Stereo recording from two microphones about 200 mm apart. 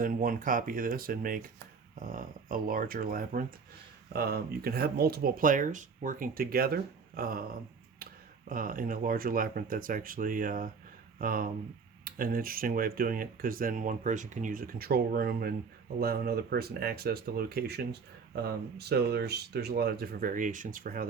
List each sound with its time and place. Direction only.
0.0 s speech: 45° right (ahead or behind)
8.4 s speech: 45° right (ahead or behind)